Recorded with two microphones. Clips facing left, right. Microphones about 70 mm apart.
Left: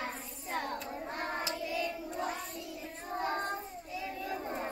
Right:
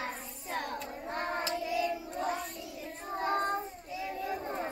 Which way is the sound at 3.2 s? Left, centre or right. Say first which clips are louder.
Right 4 dB; right.